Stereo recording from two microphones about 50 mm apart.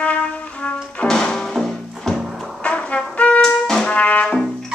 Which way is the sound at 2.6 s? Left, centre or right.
Left.